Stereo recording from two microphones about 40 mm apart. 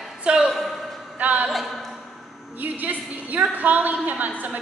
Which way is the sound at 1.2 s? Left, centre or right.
Right.